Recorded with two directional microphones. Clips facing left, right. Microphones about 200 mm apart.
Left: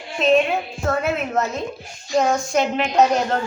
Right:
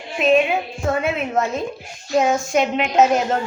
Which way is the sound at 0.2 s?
5° right (ahead or behind).